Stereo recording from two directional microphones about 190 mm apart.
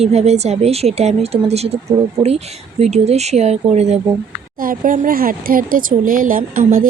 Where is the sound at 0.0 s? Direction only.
35° right (ahead or behind).